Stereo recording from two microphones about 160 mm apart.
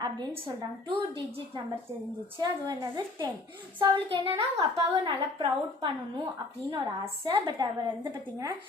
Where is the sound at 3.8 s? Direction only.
35° right (ahead or behind).